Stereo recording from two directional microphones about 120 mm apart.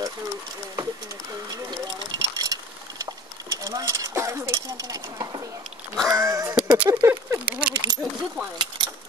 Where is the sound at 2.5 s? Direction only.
30° right (ahead or behind).